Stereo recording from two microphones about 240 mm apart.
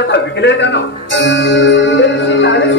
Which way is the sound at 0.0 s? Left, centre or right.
Left.